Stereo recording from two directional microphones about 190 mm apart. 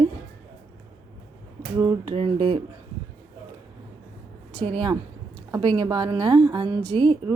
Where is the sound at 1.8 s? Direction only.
20° right (ahead or behind).